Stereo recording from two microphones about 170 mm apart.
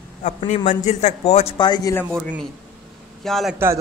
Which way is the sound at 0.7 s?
45° left (ahead or behind).